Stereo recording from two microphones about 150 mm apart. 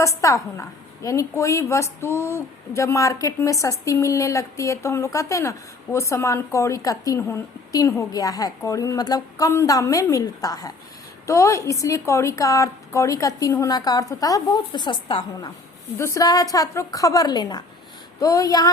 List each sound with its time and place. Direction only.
0.0 s a woman's voice: 20° left (ahead or behind)